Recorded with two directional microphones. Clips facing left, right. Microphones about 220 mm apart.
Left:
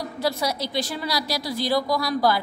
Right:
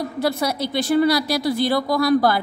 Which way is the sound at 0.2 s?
55° right (ahead or behind).